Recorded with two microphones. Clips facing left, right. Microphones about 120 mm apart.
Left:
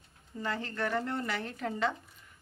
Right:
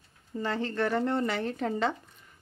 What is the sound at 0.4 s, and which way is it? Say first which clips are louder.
Speech: right 5 dB; 30° right (ahead or behind).